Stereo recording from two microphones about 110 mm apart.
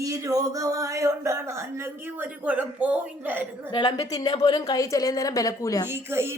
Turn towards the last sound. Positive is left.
turn(degrees=-20)  # may be behind; listen again after turning